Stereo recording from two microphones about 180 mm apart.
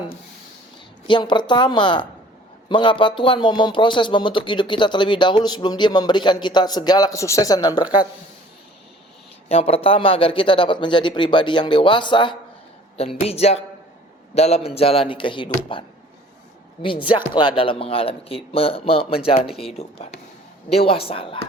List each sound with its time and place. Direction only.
1.0 s speech: 25° left (ahead or behind)
9.5 s speech: 35° left (ahead or behind)
16.8 s speech: 30° left (ahead or behind)